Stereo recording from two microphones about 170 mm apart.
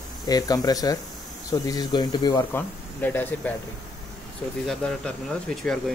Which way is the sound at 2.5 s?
10° left (ahead or behind).